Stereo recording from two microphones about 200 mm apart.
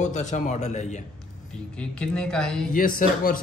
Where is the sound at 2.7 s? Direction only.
45° left (ahead or behind).